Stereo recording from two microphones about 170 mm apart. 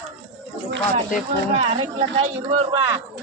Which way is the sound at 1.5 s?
40° right (ahead or behind).